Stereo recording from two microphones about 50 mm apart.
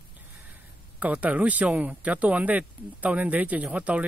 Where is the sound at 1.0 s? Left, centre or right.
Right.